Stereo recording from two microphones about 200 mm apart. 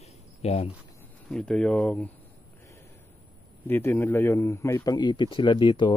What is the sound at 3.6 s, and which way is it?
A man's voice, 10° left (ahead or behind).